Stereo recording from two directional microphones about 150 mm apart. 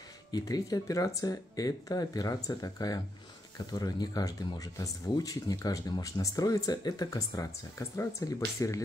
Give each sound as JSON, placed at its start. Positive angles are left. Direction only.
{"t": 0.3, "sound": "speech", "side_deg": 25}